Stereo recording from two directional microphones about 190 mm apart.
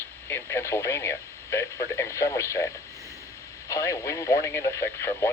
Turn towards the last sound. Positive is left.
turn(degrees=10)  # may be behind; listen again after turning